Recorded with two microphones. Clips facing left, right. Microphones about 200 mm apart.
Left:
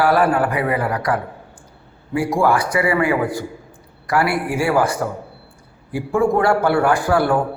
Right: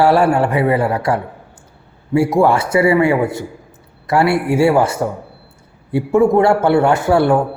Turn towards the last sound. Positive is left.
turn(degrees=-25)  # may be behind; listen again after turning